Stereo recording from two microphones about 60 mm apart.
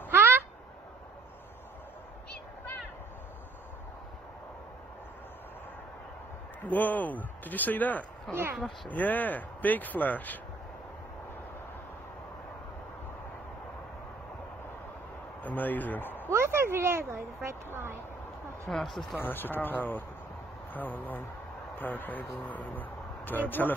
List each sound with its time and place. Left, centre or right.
0.1 s a sound: right
6.6 s speech: left
15.4 s speech: left
16.3 s speech: right
18.7 s speech: centre
19.1 s a man's voice: left